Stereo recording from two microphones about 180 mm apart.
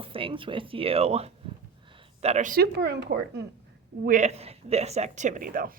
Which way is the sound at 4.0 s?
45° right (ahead or behind).